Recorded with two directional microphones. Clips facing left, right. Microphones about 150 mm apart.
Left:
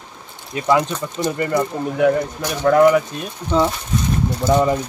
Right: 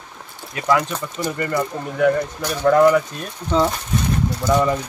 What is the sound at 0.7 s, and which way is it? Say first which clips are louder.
Speech: left 2 dB; 20° left (ahead or behind).